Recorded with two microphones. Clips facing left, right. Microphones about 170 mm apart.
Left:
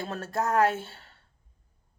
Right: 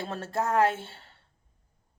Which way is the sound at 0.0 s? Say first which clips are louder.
Even; 30° right (ahead or behind).